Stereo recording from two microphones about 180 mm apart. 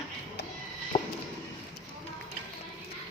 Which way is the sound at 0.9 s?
30° left (ahead or behind).